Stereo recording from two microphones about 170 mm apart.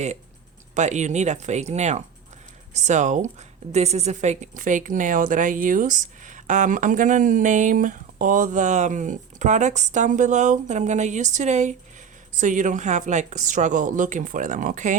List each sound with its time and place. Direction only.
0.7 s a woman's voice: 45° right (ahead or behind)